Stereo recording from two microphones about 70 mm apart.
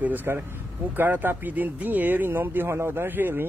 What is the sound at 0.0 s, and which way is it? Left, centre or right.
Speech, right.